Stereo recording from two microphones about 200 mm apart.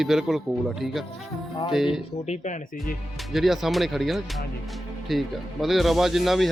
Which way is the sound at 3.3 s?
Centre (ahead or behind).